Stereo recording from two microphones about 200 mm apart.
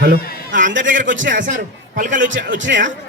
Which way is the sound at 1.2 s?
40° right (ahead or behind).